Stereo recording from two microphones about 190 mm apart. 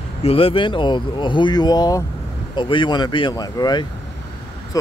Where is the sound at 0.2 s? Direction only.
30° left (ahead or behind).